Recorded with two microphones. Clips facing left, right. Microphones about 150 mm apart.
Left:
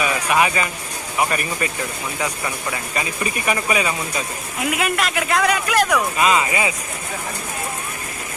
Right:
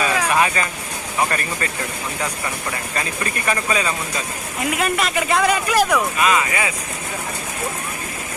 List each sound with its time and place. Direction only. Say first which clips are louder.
0.3 s speech: even; 15° left (ahead or behind)
3.0 s speech: left 1 dB; 15° left (ahead or behind)
4.6 s speech: even; centre (ahead or behind)
6.1 s speech: left 1 dB; 25° left (ahead or behind)